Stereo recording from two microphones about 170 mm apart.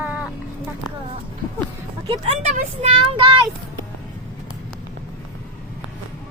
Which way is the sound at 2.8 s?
30° right (ahead or behind).